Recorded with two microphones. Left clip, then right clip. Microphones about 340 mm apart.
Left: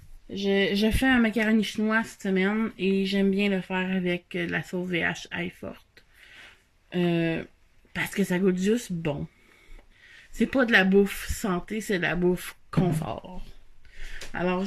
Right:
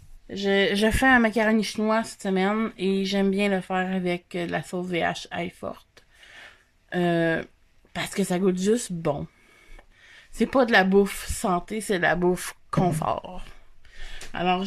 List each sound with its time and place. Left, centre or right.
0.3 s speech: right
13.1 s speech: right
14.1 s a sound: centre